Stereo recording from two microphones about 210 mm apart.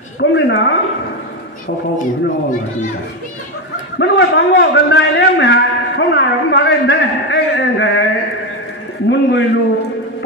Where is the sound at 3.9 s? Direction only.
55° left (ahead or behind).